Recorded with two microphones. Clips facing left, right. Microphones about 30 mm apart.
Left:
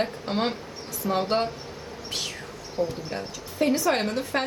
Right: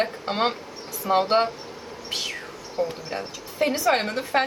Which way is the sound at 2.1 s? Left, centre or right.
Centre.